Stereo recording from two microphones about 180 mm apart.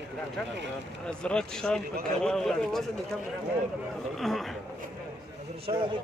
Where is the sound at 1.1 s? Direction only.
5° left (ahead or behind).